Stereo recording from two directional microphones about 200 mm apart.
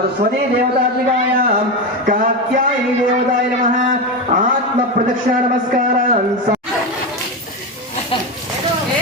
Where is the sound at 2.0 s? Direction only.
40° right (ahead or behind).